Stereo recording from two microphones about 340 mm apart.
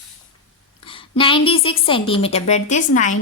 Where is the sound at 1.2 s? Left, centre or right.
Centre.